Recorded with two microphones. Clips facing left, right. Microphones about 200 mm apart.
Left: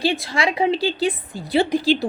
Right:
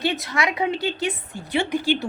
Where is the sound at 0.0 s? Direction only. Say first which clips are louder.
Left 3 dB; 30° left (ahead or behind).